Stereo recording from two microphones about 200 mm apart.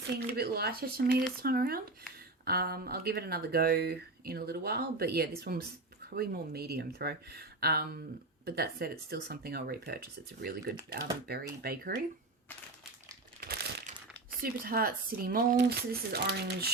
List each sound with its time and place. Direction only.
0.2 s speech: 50° right (ahead or behind)
13.4 s crumpling: 50° right (ahead or behind)
14.4 s speech: 45° right (ahead or behind)